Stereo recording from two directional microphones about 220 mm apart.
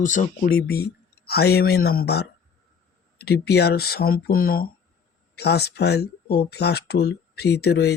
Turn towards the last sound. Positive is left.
turn(degrees=50)  # may be behind; listen again after turning